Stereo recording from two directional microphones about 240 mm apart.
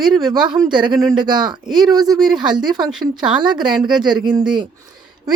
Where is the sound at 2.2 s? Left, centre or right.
Centre.